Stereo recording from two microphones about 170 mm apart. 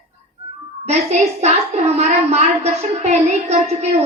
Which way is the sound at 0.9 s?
40° right (ahead or behind).